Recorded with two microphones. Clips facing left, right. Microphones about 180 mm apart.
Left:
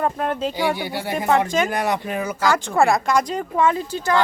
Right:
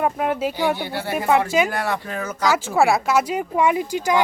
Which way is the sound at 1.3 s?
10° right (ahead or behind).